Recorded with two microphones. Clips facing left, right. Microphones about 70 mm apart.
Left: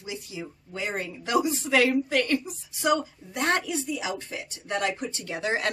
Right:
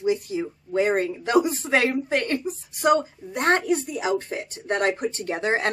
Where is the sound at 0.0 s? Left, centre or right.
Right.